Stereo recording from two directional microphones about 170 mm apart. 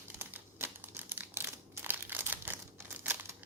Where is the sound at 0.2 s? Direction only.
10° right (ahead or behind).